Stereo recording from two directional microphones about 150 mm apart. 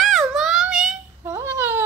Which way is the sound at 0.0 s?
Centre (ahead or behind).